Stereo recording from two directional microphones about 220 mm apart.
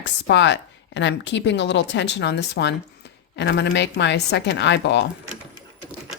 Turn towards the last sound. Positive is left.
turn(degrees=50)  # may be behind; listen again after turning